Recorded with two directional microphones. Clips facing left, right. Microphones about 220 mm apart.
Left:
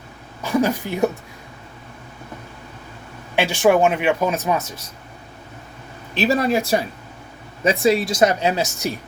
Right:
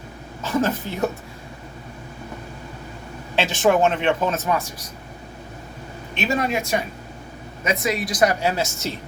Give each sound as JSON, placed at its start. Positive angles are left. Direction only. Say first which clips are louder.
{"t": 0.4, "sound": "a sound", "louder": "left 3 dB", "side_deg": 15}
{"t": 3.3, "sound": "speech", "louder": "left 2 dB", "side_deg": 10}
{"t": 6.1, "sound": "speech", "louder": "left 5 dB", "side_deg": 35}